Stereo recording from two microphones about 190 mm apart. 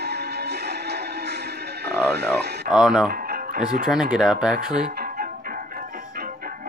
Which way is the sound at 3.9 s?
5° right (ahead or behind).